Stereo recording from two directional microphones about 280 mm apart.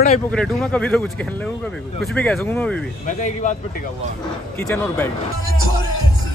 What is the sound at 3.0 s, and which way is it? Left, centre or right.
Speech, left.